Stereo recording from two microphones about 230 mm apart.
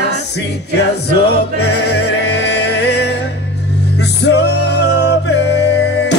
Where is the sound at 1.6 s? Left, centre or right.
Left.